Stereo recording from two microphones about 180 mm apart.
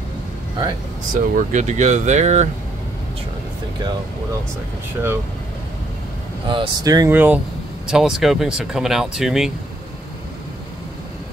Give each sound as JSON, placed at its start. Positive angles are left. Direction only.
{"t": 1.1, "sound": "speech", "side_deg": -45}
{"t": 6.4, "sound": "speech", "side_deg": -25}